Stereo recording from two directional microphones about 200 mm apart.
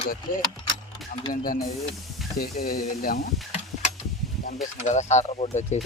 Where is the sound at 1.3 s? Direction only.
45° left (ahead or behind).